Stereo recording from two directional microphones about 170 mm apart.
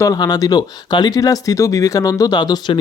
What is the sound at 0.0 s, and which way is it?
Speech, 20° left (ahead or behind).